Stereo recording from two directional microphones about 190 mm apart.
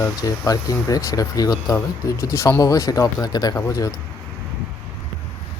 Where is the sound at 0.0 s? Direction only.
15° left (ahead or behind).